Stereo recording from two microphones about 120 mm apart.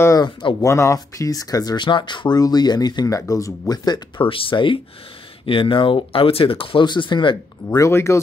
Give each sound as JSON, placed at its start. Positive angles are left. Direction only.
{"t": 0.2, "sound": "speech", "side_deg": 40}
{"t": 0.7, "sound": "speech", "side_deg": 25}
{"t": 4.3, "sound": "speech", "side_deg": 45}
{"t": 7.7, "sound": "speech", "side_deg": 25}